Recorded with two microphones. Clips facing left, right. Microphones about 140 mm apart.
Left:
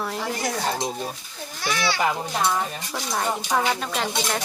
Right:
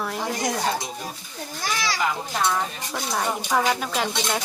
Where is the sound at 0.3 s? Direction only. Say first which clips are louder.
Right 1 dB; 15° right (ahead or behind).